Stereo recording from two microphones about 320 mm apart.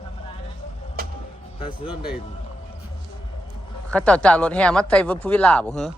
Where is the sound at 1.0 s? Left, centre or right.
Right.